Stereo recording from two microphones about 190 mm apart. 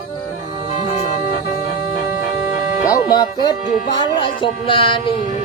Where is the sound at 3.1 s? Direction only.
20° left (ahead or behind).